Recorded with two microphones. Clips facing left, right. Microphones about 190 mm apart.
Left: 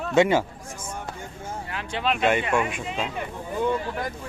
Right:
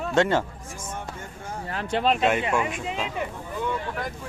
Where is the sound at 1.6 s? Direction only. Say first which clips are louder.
Right 4 dB; 40° right (ahead or behind).